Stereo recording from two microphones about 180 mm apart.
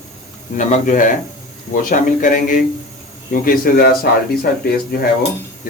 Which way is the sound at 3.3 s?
55° left (ahead or behind).